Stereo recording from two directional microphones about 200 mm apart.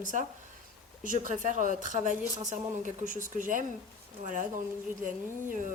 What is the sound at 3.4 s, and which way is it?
Speech, 40° right (ahead or behind).